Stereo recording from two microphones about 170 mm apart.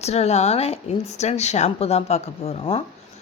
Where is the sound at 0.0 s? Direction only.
40° left (ahead or behind).